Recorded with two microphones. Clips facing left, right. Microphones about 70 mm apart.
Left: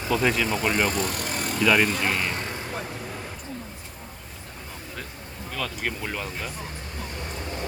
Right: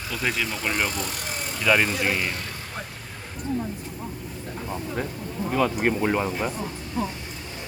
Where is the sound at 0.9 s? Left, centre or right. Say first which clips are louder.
Left 3 dB; left.